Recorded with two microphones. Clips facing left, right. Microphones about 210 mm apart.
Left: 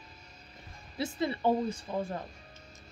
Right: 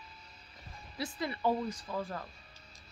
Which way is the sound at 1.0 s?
25° left (ahead or behind).